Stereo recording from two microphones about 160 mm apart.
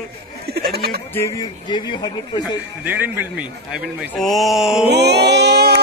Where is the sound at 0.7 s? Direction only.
85° right.